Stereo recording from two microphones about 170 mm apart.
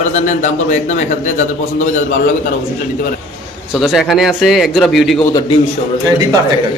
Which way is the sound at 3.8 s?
Centre (ahead or behind).